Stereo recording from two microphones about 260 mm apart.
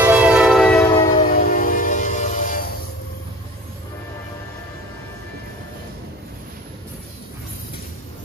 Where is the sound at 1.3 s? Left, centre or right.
Left.